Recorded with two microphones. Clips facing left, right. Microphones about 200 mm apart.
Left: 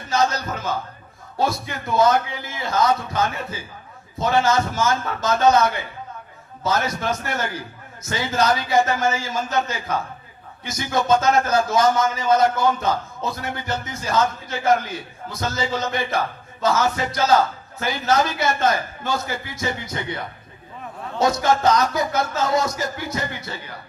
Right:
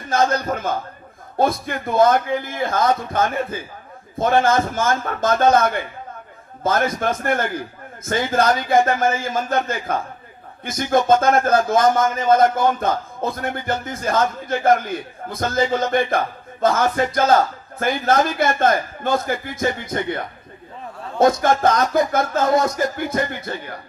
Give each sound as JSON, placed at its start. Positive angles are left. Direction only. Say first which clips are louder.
{"t": 0.1, "sound": "a man's voice", "louder": "right 3 dB", "side_deg": -55}